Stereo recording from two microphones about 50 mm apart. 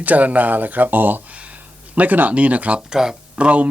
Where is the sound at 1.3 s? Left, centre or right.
Right.